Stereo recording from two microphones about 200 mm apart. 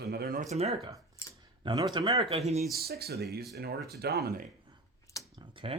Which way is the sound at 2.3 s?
35° right (ahead or behind).